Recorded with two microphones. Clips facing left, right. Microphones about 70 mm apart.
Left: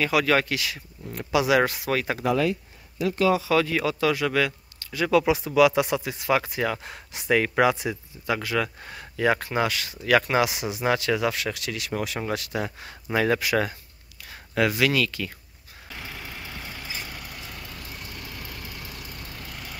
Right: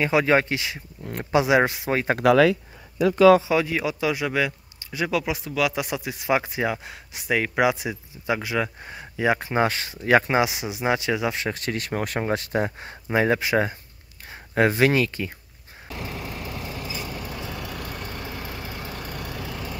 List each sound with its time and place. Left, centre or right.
0.0 s speech: right
1.0 s speech: right
1.4 s speech: right
3.4 s speech: centre
5.1 s speech: centre
6.3 s speech: centre
6.8 s speech: centre
9.6 s speech: right
12.3 s speech: right
17.6 s vehicle: right
17.8 s vehicle: right
19.1 s vehicle: right